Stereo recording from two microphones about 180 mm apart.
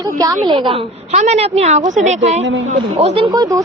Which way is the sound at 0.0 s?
20° right (ahead or behind).